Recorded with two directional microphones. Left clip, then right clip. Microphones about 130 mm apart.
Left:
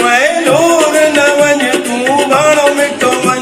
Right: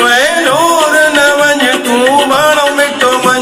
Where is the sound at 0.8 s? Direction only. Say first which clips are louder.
Right 1 dB; 25° left (ahead or behind).